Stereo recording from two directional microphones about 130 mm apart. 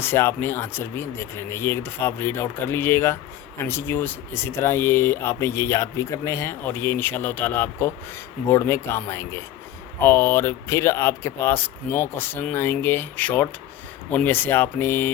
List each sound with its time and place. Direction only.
0.0 s speech: 20° left (ahead or behind)